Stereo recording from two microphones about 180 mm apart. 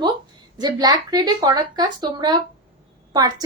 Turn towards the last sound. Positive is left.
turn(degrees=-20)  # may be behind; listen again after turning